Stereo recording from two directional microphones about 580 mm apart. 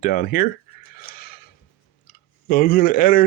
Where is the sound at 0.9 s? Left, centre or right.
Centre.